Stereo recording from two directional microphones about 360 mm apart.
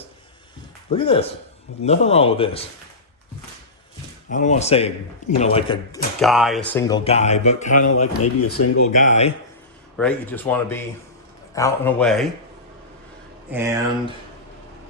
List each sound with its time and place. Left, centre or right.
0.9 s speech: centre
4.3 s speech: left
6.1 s speech: centre
7.7 s speech: left
9.0 s speech: centre
10.0 s speech: centre
13.5 s speech: centre